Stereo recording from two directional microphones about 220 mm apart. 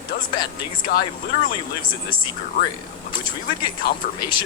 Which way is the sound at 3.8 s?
45° left (ahead or behind).